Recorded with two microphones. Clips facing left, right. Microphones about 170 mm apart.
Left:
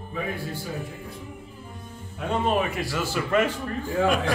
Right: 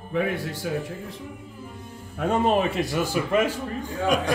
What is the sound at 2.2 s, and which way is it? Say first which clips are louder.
Speech: right 3 dB; 35° right (ahead or behind).